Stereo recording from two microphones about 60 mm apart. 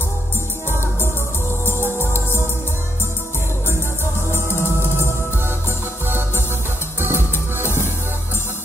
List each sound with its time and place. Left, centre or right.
2.0 s music: left
4.3 s music: left
6.0 s music: right
7.6 s music: left